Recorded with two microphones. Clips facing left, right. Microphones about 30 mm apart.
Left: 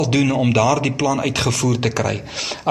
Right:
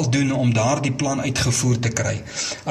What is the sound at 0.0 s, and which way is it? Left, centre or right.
A man's voice, left.